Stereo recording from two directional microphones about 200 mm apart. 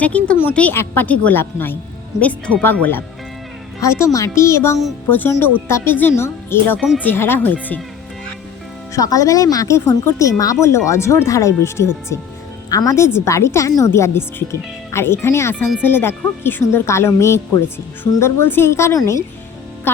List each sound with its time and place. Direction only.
0.0 s speech: 5° left (ahead or behind)
6.7 s speech: centre (ahead or behind)
7.0 s speech: 10° left (ahead or behind)
8.9 s speech: 15° left (ahead or behind)